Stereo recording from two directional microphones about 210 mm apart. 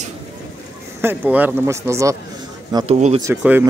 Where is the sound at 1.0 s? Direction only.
10° right (ahead or behind).